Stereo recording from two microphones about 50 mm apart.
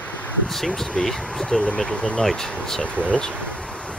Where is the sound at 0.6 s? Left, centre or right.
Centre.